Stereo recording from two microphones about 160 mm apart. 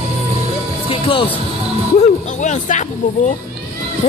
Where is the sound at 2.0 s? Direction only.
50° left (ahead or behind).